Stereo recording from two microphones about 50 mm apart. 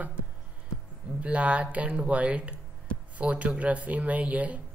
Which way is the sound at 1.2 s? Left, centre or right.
Right.